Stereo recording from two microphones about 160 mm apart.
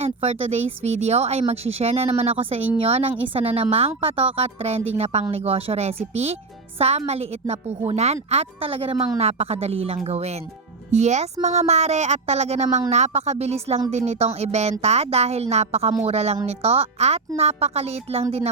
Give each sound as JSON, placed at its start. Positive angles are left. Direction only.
{"t": 0.0, "sound": "speech", "side_deg": -40}